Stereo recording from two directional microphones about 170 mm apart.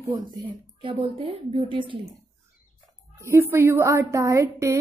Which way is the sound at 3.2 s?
15° right (ahead or behind).